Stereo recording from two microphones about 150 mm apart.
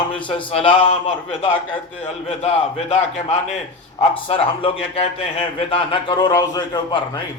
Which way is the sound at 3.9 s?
40° left (ahead or behind).